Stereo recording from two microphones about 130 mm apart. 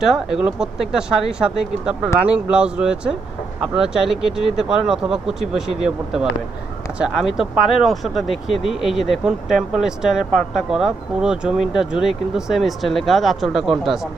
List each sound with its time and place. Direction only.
0.0 s speech: 5° right (ahead or behind)
7.0 s speech: 5° right (ahead or behind)